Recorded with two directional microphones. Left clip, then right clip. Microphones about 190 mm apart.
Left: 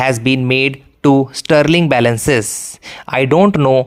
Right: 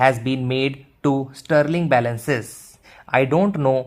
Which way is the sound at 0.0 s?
25° left (ahead or behind).